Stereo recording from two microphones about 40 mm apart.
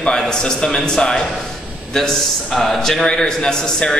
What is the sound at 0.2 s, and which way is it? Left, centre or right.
A man's voice, centre.